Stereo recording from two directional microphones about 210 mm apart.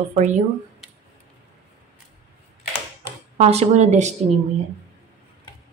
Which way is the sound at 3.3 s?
30° right (ahead or behind).